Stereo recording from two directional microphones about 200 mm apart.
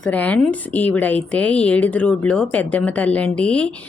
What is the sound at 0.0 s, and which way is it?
A woman's voice, 5° left (ahead or behind).